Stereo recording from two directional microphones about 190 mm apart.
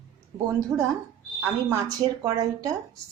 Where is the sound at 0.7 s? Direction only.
10° right (ahead or behind).